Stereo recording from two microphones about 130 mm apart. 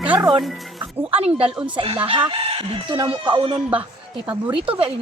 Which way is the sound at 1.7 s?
40° right (ahead or behind).